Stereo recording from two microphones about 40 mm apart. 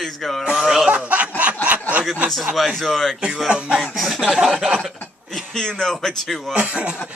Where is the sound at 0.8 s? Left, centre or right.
Right.